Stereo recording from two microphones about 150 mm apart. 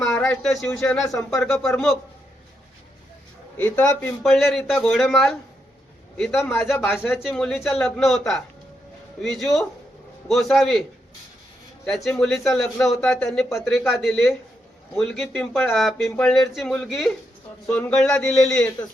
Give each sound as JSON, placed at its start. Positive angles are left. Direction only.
{"t": 0.0, "sound": "speech", "side_deg": 5}
{"t": 1.1, "sound": "speech", "side_deg": 20}
{"t": 1.4, "sound": "a man's voice", "side_deg": 0}
{"t": 3.6, "sound": "a man's voice", "side_deg": 10}
{"t": 11.9, "sound": "a man's voice", "side_deg": 0}